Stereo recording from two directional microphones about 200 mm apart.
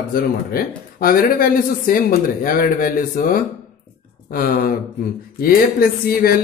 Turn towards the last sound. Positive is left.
turn(degrees=50)  # may be behind; listen again after turning